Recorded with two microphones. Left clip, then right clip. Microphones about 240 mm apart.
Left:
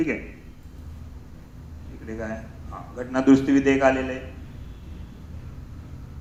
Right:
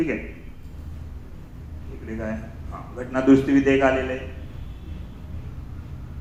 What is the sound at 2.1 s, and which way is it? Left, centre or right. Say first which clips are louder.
A man's voice: right 1 dB; left.